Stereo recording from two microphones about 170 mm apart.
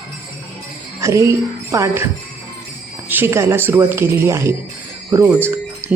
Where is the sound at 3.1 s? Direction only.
15° right (ahead or behind).